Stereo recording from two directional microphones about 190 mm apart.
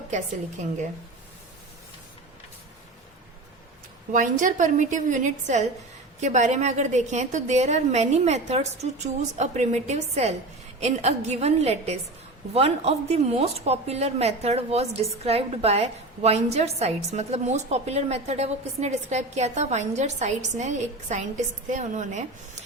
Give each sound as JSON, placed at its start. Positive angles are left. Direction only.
{"t": 0.6, "sound": "a woman's voice", "side_deg": -40}
{"t": 4.1, "sound": "a woman's voice", "side_deg": -45}